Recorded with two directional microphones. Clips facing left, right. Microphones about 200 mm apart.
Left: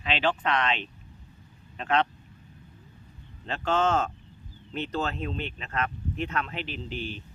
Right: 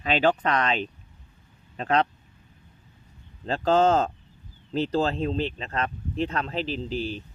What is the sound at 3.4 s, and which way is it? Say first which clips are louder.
Speech: right 5 dB; 35° right (ahead or behind).